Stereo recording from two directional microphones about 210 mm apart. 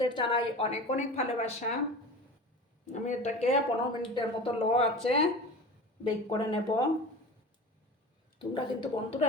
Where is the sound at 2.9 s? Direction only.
35° left (ahead or behind).